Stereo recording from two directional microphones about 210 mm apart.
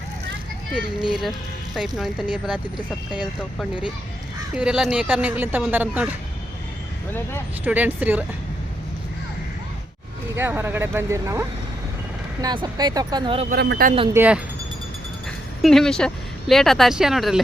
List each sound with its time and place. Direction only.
2.0 s speech: centre (ahead or behind)
7.6 s speech: 10° right (ahead or behind)
10.3 s speech: 10° right (ahead or behind); by 13.5 s 25° right (ahead or behind)
13.5 s a man's voice: 45° right (ahead or behind)
14.1 s speech: 10° right (ahead or behind)
15.6 s speech: centre (ahead or behind)